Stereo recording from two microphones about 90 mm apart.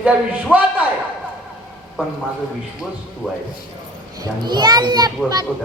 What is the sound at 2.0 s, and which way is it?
Speech, 15° right (ahead or behind).